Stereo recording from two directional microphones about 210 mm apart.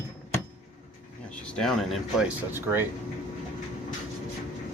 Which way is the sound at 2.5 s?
10° right (ahead or behind).